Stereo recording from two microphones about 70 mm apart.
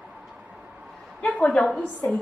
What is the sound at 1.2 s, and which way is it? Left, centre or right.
Speech, centre.